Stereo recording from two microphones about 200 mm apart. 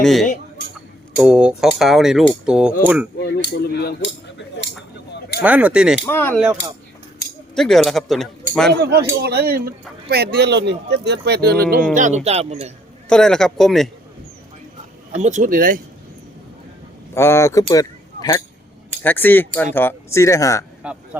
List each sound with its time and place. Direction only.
0.0 s speech: centre (ahead or behind)
3.2 s a sound: 55° left (ahead or behind)
5.4 s speech: 5° right (ahead or behind)
6.1 s speech: 10° left (ahead or behind)
7.5 s speech: centre (ahead or behind)
8.7 s speech: 55° right (ahead or behind)
11.9 s speech: 35° right (ahead or behind)
13.1 s speech: 5° left (ahead or behind)
15.1 s speech: 35° right (ahead or behind)
17.2 s speech: 15° left (ahead or behind)